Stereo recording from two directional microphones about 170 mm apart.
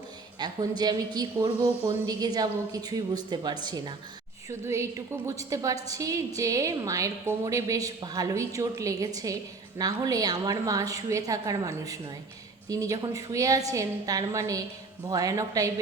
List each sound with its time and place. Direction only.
0.3 s a woman's voice: 25° right (ahead or behind)